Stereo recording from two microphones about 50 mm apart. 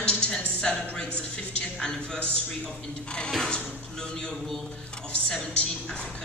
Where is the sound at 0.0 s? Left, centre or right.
Centre.